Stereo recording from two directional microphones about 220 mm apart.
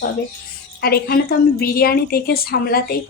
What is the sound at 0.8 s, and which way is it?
A woman's voice, 45° left (ahead or behind).